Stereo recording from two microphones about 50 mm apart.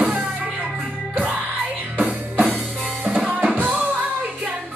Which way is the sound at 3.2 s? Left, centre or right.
Right.